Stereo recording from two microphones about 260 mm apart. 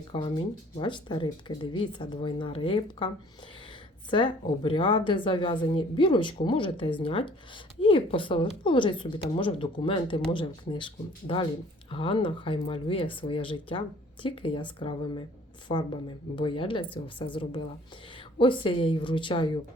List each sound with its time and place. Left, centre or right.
0.1 s speech: centre
4.1 s speech: centre